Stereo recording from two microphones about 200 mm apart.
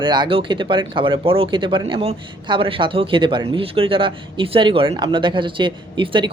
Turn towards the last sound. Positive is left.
turn(degrees=-25)  # may be behind; listen again after turning